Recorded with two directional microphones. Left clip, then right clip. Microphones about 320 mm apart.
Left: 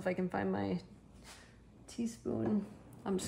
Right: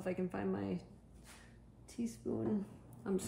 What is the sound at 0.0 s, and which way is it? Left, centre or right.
Speech, left.